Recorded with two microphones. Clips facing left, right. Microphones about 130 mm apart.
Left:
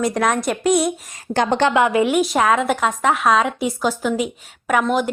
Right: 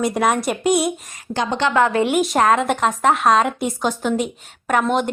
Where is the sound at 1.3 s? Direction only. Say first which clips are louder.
Left 4 dB; 55° left (ahead or behind).